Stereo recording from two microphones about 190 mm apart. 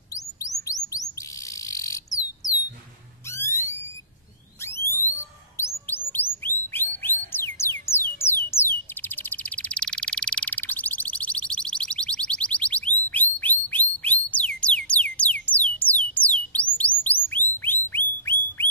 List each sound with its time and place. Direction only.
0.1 s chirp: 15° left (ahead or behind)
1.5 s bird: 15° left (ahead or behind)
3.3 s a sound: 15° left (ahead or behind)
4.6 s alarm: 15° left (ahead or behind)
5.6 s bird: 10° left (ahead or behind)
17.0 s music: 10° left (ahead or behind)
17.6 s a sound: 10° left (ahead or behind)